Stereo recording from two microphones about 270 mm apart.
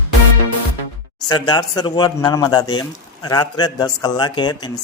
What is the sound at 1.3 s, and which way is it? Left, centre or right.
A man's voice, centre.